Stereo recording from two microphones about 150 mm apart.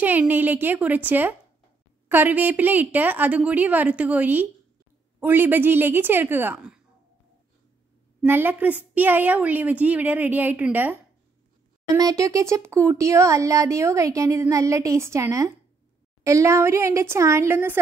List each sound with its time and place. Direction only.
0.0 s a woman's voice: 10° right (ahead or behind)
8.3 s a woman's voice: 15° right (ahead or behind)
12.0 s speech: 20° right (ahead or behind)